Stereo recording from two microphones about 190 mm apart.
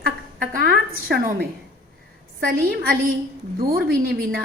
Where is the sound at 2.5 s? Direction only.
50° right (ahead or behind).